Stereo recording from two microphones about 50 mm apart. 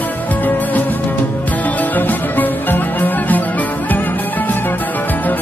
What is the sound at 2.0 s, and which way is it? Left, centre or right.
Music, left.